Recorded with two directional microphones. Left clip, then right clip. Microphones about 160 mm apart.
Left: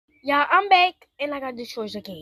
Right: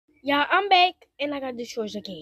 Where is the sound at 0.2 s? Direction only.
20° right (ahead or behind).